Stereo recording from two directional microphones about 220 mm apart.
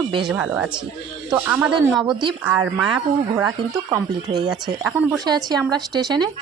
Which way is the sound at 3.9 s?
20° right (ahead or behind).